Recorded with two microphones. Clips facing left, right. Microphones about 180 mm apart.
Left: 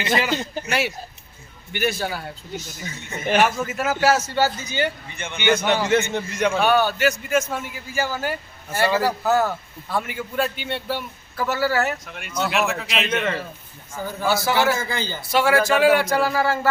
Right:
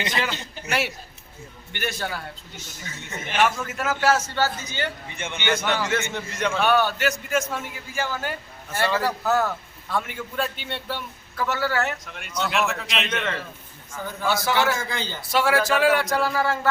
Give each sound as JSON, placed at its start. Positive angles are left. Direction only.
{"t": 0.7, "sound": "a man's voice", "side_deg": 0}
{"t": 3.4, "sound": "a man's voice", "side_deg": 10}
{"t": 5.1, "sound": "a man's voice", "side_deg": -20}
{"t": 5.4, "sound": "a man's voice", "side_deg": 15}